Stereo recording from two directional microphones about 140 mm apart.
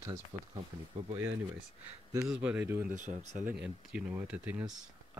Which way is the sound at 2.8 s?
65° right (ahead or behind).